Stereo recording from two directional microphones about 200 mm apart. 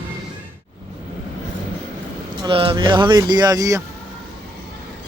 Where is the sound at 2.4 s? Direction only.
25° right (ahead or behind).